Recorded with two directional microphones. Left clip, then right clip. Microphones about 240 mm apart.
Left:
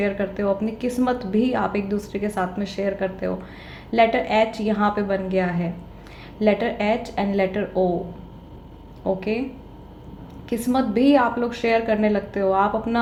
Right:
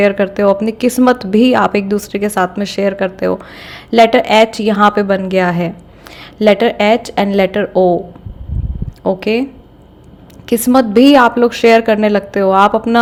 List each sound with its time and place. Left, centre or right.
0.0 s a woman's voice: right
9.0 s a woman's voice: right
10.4 s a woman's voice: right